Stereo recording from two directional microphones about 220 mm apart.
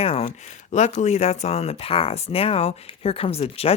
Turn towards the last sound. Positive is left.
turn(degrees=25)  # may be behind; listen again after turning